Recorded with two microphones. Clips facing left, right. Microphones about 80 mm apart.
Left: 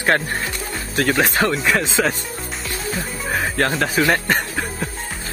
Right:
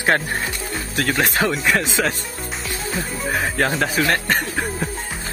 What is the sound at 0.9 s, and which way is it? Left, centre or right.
Speech, centre.